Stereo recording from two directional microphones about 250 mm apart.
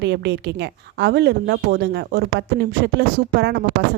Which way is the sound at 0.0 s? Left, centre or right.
Right.